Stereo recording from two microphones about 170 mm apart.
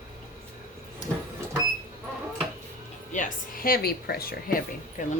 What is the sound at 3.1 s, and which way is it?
Speech, 50° left (ahead or behind).